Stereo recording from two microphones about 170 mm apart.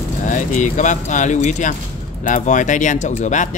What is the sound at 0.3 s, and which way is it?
Speech, 50° left (ahead or behind).